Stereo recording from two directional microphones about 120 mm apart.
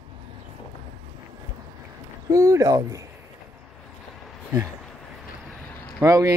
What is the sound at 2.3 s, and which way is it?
Speech, 25° right (ahead or behind).